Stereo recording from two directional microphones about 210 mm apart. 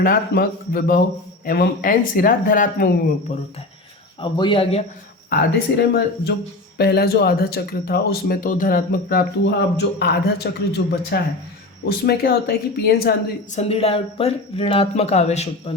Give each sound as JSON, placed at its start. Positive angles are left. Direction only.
{"t": 0.0, "sound": "speech", "side_deg": 45}
{"t": 5.3, "sound": "speech", "side_deg": 50}
{"t": 13.6, "sound": "speech", "side_deg": 30}